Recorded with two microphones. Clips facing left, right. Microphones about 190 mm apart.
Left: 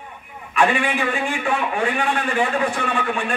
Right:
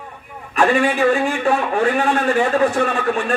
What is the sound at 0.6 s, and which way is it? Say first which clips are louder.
A man's voice: right 4 dB; 40° right (ahead or behind).